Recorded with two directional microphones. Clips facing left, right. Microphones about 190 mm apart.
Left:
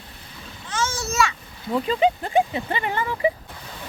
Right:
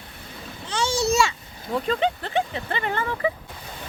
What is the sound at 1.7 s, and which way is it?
Speech, 5° left (ahead or behind).